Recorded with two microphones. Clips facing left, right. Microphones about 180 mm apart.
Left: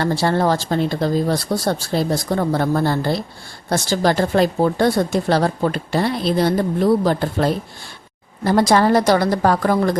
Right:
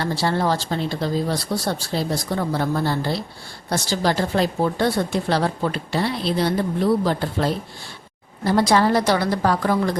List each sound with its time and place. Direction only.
0.0 s a woman's voice: 50° left (ahead or behind)